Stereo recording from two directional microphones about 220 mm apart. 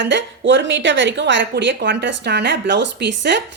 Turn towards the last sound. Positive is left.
turn(degrees=-50)  # may be behind; listen again after turning